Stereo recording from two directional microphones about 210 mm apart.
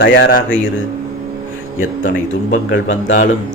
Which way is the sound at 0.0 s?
50° left (ahead or behind).